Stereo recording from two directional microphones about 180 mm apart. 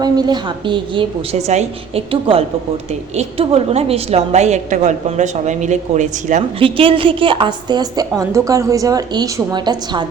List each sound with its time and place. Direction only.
0.0 s a woman's voice: 20° right (ahead or behind); by 6.4 s 40° right (ahead or behind)
6.6 s a woman's voice: 30° right (ahead or behind)